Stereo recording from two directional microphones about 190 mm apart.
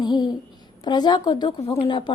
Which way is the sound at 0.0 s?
20° left (ahead or behind).